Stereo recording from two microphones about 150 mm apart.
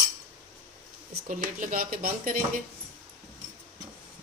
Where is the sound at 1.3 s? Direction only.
60° right (ahead or behind).